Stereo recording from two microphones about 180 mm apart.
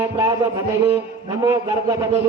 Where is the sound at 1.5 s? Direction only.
20° right (ahead or behind).